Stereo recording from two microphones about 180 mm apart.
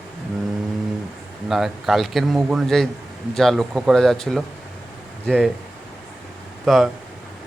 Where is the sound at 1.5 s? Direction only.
Centre (ahead or behind).